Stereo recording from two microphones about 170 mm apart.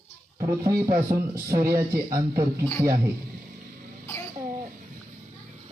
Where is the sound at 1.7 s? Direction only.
60° right (ahead or behind).